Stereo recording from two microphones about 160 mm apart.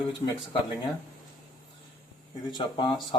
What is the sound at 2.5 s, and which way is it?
Speech, 30° left (ahead or behind).